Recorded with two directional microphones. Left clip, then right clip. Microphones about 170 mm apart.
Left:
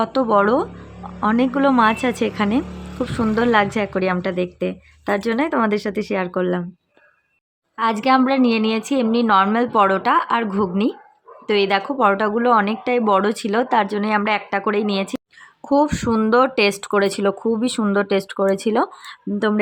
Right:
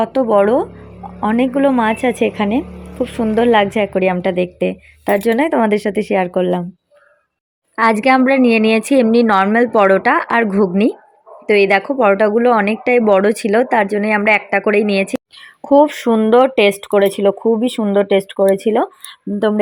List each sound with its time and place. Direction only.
0.0 s speech: 5° right (ahead or behind)
7.8 s a woman's voice: 25° right (ahead or behind)
15.6 s speech: 10° right (ahead or behind)